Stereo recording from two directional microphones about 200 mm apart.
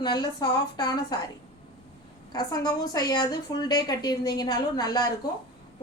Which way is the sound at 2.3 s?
20° left (ahead or behind).